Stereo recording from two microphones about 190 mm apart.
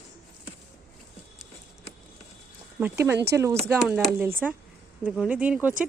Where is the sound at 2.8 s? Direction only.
15° right (ahead or behind).